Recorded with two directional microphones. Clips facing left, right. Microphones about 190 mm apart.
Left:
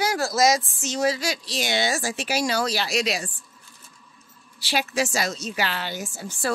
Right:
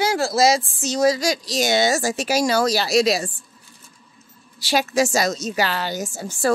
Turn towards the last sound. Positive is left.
turn(degrees=-45)  # may be behind; listen again after turning